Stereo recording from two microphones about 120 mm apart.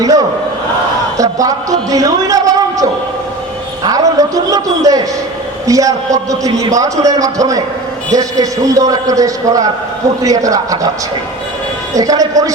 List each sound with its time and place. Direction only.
0.0 s a man's voice: 30° right (ahead or behind)
3.8 s a man's voice: 30° right (ahead or behind)
11.9 s a man's voice: 30° right (ahead or behind)